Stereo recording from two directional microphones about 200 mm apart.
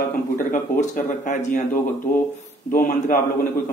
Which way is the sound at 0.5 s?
40° left (ahead or behind).